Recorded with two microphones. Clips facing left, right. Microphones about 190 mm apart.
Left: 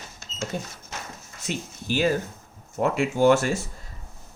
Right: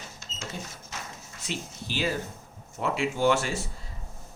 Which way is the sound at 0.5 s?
50° left (ahead or behind).